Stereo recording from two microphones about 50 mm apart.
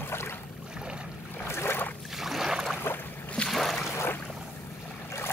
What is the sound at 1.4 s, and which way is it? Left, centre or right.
Boat, left.